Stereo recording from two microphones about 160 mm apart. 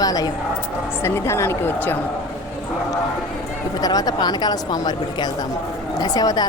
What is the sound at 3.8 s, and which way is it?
A woman's voice, 25° left (ahead or behind).